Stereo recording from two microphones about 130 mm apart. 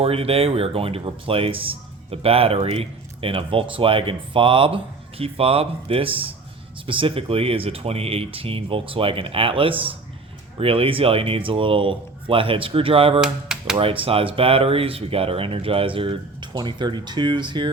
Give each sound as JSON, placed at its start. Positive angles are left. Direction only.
{"t": 0.0, "sound": "speech", "side_deg": -50}
{"t": 13.2, "sound": "speech", "side_deg": -5}
{"t": 13.7, "sound": "speech", "side_deg": -45}